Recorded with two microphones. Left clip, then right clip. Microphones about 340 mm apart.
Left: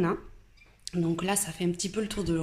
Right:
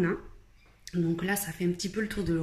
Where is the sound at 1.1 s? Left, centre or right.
Centre.